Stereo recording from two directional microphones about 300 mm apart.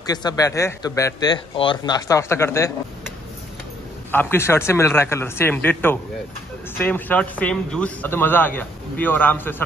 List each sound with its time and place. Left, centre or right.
0.0 s speech: centre
4.1 s speech: centre